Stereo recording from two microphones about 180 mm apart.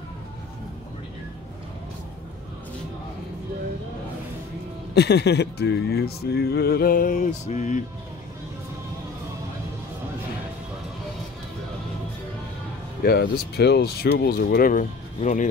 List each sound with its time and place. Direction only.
4.9 s speech: 65° left (ahead or behind); by 7.8 s 40° left (ahead or behind)
13.0 s speech: 60° left (ahead or behind); by 15.5 s 45° left (ahead or behind)